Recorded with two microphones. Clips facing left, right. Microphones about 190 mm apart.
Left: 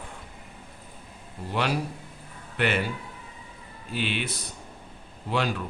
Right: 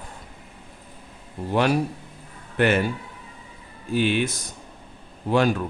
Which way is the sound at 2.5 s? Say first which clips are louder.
Right 6 dB; 45° right (ahead or behind).